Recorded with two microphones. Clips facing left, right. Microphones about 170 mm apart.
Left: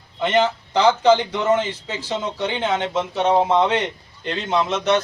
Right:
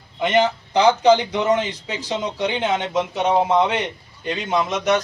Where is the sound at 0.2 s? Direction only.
15° right (ahead or behind).